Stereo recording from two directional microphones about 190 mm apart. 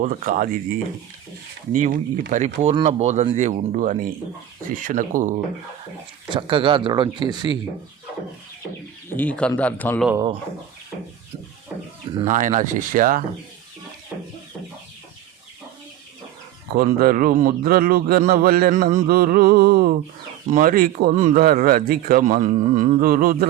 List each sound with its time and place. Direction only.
0.0 s speech: 45° right (ahead or behind)
1.7 s speech: 45° right (ahead or behind)
6.2 s speech: 25° right (ahead or behind)
9.0 s speech: 10° left (ahead or behind)
12.2 s speech: 40° right (ahead or behind)
16.7 s speech: 50° right (ahead or behind)